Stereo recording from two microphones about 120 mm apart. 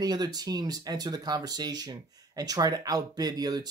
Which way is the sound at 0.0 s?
35° right (ahead or behind).